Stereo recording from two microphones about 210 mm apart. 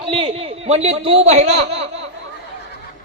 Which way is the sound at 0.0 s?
25° right (ahead or behind).